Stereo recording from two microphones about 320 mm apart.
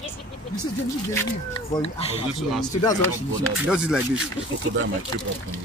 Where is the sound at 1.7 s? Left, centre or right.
Centre.